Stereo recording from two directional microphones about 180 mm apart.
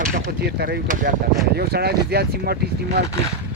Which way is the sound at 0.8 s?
45° right (ahead or behind).